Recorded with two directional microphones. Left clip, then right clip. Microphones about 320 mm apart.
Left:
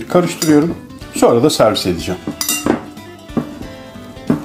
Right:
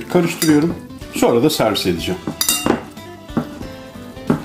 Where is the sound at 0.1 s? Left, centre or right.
Centre.